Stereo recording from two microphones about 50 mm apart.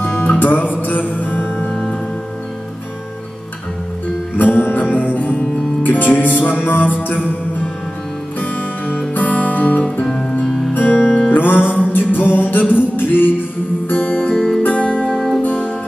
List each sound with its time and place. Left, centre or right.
0.0 s music: left
0.4 s music: left
4.4 s music: left
8.4 s music: left
11.0 s music: left
11.2 s music: left
14.3 s music: centre
14.7 s music: left